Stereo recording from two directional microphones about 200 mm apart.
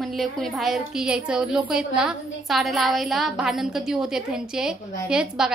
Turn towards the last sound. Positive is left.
turn(degrees=-5)  # may be behind; listen again after turning